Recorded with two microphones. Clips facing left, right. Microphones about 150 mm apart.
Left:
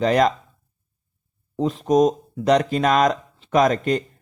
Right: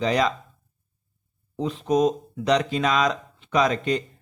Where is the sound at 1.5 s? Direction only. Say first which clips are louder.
Left 4 dB; 45° left (ahead or behind).